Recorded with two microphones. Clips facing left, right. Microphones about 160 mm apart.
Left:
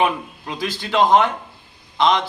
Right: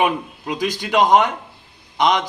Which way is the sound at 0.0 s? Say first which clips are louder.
Right 1 dB; 15° right (ahead or behind).